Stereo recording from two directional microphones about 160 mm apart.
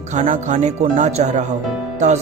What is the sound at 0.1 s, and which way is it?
Speech, 50° right (ahead or behind).